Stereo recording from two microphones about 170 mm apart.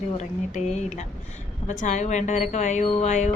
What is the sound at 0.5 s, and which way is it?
Speech, 40° left (ahead or behind).